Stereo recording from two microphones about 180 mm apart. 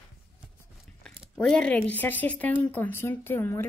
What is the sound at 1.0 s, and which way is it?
Speech, 5° left (ahead or behind).